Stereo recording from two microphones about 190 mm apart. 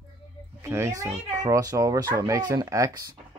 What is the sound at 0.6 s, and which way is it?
A child's voice, 15° right (ahead or behind).